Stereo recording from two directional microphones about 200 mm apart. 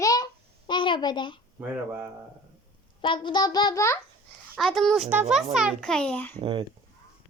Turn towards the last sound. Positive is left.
turn(degrees=-25)  # may be behind; listen again after turning